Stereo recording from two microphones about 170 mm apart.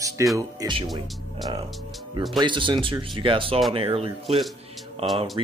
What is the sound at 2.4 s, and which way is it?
Speech, 30° right (ahead or behind).